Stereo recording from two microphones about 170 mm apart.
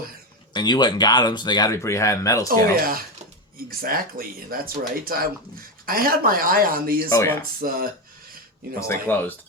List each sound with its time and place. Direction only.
0.5 s speech: 25° left (ahead or behind)
2.5 s speech: 60° right (ahead or behind)
7.1 s speech: 20° left (ahead or behind)
7.6 s speech: 55° right (ahead or behind)
8.9 s speech: 10° left (ahead or behind)